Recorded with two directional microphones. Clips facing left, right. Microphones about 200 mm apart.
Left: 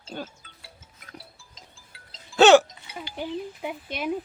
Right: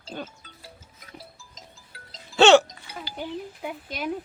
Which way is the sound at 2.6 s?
35° right (ahead or behind).